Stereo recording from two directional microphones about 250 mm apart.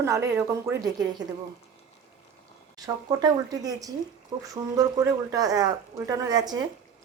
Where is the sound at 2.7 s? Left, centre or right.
Centre.